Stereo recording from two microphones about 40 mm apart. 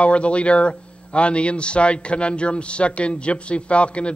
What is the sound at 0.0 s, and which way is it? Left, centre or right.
Speech, left.